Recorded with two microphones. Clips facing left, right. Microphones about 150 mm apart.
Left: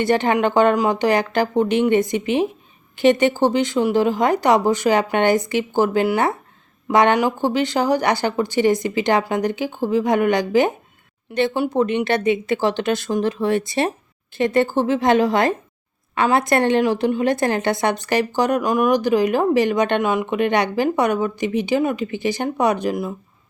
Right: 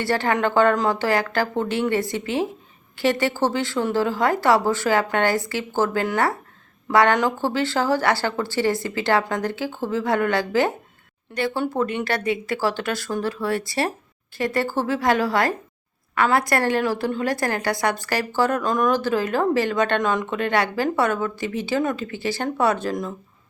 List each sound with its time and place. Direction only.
0.0 s a woman's voice: 20° left (ahead or behind)